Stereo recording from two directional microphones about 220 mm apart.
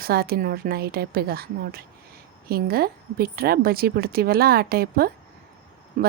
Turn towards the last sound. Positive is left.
turn(degrees=-40)  # may be behind; listen again after turning